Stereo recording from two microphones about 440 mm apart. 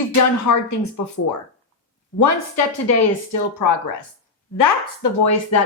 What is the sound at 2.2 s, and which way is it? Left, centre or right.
Speech, left.